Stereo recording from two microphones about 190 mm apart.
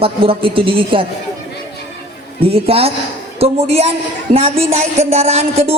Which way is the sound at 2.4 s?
30° right (ahead or behind).